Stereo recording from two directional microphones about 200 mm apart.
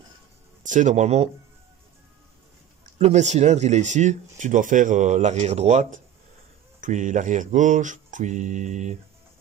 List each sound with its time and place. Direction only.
0.7 s speech: 40° right (ahead or behind)
3.0 s speech: 35° right (ahead or behind)